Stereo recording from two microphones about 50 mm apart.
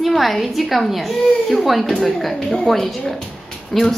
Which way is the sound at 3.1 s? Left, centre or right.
Centre.